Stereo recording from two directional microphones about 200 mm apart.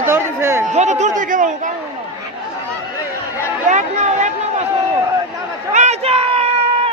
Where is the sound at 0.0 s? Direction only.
15° right (ahead or behind).